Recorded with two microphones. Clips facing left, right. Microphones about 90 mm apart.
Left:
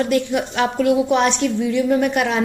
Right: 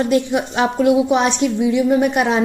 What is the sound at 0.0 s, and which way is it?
A woman's voice, 20° right (ahead or behind).